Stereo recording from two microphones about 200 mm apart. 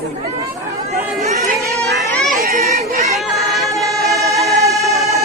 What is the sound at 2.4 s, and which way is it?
Children playing, 35° right (ahead or behind).